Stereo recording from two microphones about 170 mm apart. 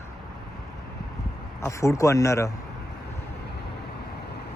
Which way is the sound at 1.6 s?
15° left (ahead or behind).